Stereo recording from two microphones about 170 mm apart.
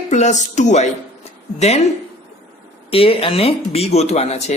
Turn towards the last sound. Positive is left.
turn(degrees=40)  # may be behind; listen again after turning